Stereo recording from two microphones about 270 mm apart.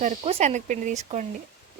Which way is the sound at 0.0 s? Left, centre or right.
Right.